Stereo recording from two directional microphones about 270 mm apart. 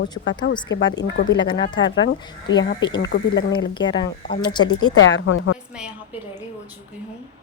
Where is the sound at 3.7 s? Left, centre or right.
Centre.